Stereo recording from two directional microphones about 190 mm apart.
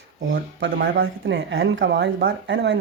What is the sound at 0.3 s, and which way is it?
Speech, 70° right (ahead or behind).